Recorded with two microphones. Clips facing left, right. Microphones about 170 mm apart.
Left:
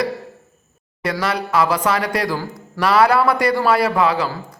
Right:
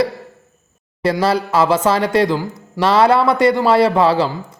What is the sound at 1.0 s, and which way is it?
A man's voice, 30° right (ahead or behind).